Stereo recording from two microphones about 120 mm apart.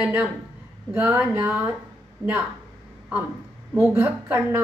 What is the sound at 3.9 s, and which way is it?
Speech, 15° right (ahead or behind).